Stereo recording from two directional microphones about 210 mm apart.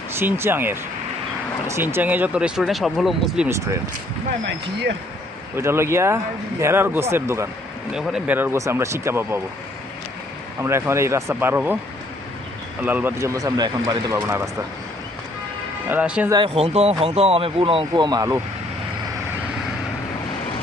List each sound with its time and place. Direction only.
0.2 s speech: 10° right (ahead or behind)
5.5 s speech: 10° right (ahead or behind)
10.6 s speech: 15° right (ahead or behind)
12.8 s speech: 10° right (ahead or behind)
15.9 s speech: 5° right (ahead or behind)
16.3 s speech: 25° right (ahead or behind)